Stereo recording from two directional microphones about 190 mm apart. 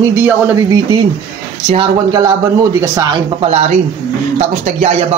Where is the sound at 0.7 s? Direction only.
25° right (ahead or behind).